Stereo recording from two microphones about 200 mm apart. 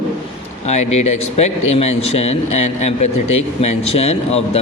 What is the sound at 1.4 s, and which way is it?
A man's voice, 30° left (ahead or behind).